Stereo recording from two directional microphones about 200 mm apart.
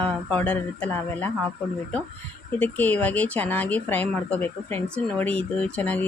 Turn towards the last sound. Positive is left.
turn(degrees=5)  # may be behind; listen again after turning